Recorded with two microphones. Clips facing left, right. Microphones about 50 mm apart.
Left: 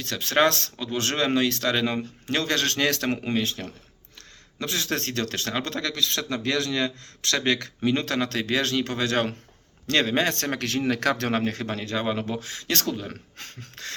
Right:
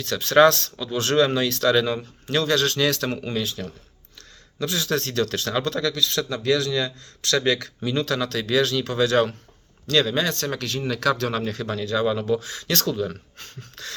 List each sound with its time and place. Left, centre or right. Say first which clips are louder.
0.0 s speech: right 6 dB; left
2.3 s speech: right 4 dB; left
9.8 s speech: right 1 dB; left
13.1 s speech: right 3 dB; left